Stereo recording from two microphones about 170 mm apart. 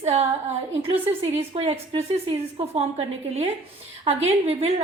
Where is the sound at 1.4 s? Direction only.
35° right (ahead or behind).